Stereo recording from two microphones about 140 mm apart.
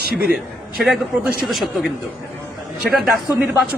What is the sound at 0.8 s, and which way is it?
Speech, centre (ahead or behind).